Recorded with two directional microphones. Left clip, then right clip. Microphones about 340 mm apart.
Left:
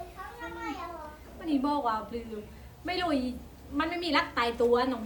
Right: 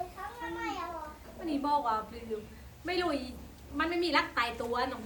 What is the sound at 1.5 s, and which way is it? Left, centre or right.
A woman's voice, centre.